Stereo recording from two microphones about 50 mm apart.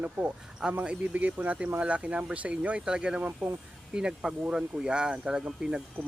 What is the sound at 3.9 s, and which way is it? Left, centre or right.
Speech, centre.